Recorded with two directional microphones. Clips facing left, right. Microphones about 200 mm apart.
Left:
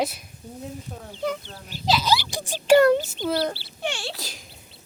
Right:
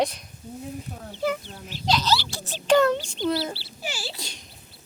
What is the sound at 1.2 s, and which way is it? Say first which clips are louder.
Speech: right 2 dB; 5° right (ahead or behind).